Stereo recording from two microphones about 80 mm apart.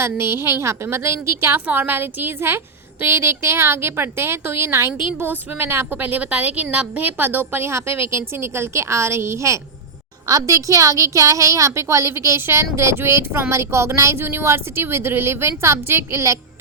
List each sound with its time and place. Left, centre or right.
0.0 s a woman's voice: right
1.6 s a woman's voice: right